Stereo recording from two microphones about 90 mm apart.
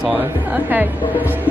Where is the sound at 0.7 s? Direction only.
20° right (ahead or behind).